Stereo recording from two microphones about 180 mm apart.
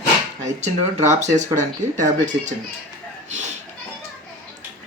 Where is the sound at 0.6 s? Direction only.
40° right (ahead or behind).